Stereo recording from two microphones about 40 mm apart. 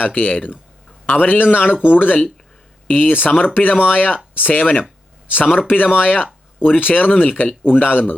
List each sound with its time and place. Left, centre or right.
0.0 s speech: left
7.6 s speech: left